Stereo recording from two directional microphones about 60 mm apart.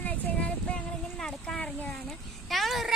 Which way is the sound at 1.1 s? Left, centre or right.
Centre.